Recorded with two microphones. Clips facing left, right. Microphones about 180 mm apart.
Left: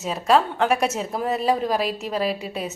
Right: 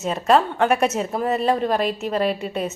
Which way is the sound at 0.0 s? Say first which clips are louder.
Right 2 dB; centre (ahead or behind).